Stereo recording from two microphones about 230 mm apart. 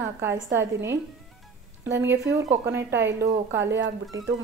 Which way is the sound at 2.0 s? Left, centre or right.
Centre.